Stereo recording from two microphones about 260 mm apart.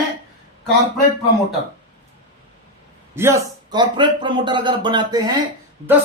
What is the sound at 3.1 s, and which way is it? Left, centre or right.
Speech, centre.